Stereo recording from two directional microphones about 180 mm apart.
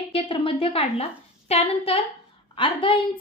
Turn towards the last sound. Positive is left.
turn(degrees=30)  # may be behind; listen again after turning